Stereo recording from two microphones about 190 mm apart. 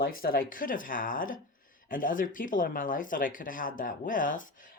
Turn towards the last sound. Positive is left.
turn(degrees=45)  # may be behind; listen again after turning